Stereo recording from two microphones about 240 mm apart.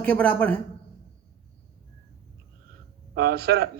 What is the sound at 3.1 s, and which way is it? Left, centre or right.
Speech, right.